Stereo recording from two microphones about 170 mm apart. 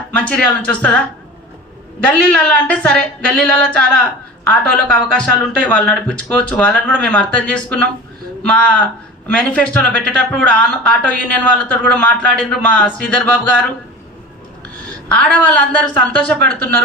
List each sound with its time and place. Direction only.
0.2 s speech: 5° left (ahead or behind)
2.0 s speech: 5° left (ahead or behind)
15.1 s speech: 5° left (ahead or behind)